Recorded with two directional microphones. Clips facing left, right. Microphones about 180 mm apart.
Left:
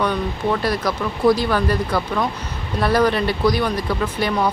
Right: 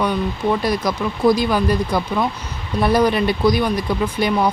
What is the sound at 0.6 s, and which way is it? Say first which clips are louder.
Speech: right 1 dB; 15° right (ahead or behind).